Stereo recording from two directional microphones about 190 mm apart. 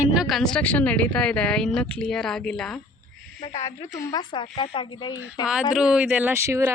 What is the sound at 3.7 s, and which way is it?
Speech, 20° left (ahead or behind).